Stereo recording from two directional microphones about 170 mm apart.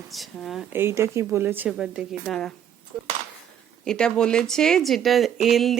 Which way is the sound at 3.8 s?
5° left (ahead or behind).